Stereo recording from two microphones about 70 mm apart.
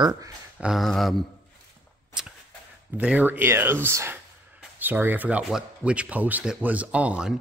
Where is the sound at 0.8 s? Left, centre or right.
Centre.